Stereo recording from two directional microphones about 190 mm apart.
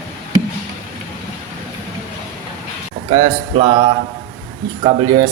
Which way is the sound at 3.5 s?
25° right (ahead or behind).